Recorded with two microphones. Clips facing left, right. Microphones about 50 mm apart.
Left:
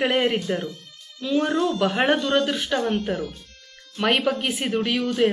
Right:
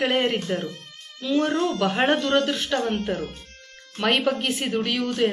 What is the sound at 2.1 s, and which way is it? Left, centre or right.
Speech, centre.